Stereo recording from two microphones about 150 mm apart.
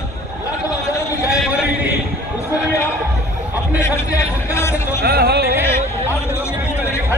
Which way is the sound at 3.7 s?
20° left (ahead or behind).